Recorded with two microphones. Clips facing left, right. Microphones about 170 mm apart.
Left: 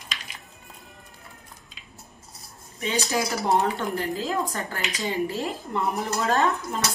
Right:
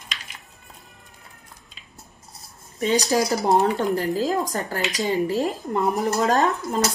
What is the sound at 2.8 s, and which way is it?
Speech, 40° right (ahead or behind).